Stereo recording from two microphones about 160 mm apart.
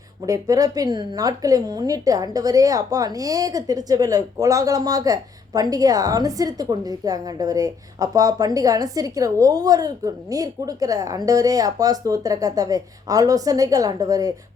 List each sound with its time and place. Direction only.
0.3 s speech: 20° right (ahead or behind)